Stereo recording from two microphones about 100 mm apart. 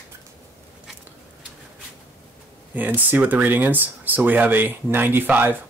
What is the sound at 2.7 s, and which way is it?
Speech, 20° right (ahead or behind).